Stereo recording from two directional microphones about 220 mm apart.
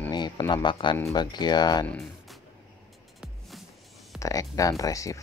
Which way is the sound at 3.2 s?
Centre (ahead or behind).